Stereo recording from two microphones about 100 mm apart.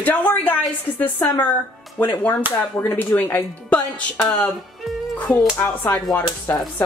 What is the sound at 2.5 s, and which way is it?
Speech, 20° left (ahead or behind).